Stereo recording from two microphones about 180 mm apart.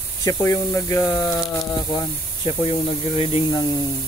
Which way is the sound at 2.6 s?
30° left (ahead or behind).